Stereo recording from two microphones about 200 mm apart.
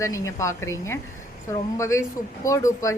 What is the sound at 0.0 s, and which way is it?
Speech, 15° left (ahead or behind).